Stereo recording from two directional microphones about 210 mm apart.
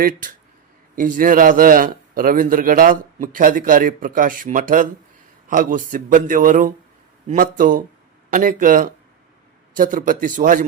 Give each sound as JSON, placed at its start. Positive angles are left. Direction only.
{"t": 0.9, "sound": "a man's voice", "side_deg": -40}